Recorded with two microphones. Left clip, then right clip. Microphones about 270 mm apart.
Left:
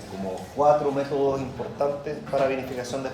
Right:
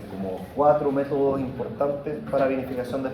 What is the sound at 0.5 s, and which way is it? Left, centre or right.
Speech, left.